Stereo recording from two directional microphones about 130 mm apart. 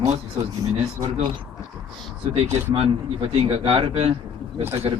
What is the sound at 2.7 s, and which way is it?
Speech, 50° right (ahead or behind).